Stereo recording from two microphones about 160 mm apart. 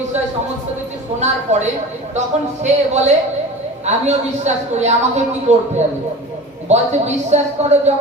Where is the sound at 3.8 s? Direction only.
45° right (ahead or behind).